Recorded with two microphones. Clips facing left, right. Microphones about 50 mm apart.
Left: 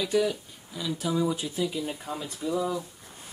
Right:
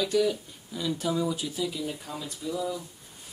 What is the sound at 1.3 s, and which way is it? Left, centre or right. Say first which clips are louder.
Speech: left 2 dB; left.